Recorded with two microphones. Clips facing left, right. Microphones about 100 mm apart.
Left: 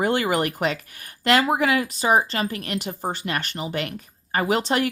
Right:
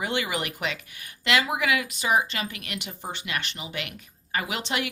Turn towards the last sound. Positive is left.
turn(degrees=40)  # may be behind; listen again after turning